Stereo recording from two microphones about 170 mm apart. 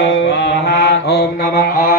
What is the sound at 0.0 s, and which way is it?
Mantra, 90° left.